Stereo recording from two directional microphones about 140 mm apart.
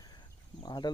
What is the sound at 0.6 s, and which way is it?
Speech, 30° left (ahead or behind).